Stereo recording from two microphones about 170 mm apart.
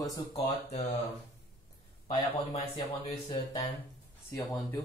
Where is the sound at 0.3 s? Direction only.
35° left (ahead or behind).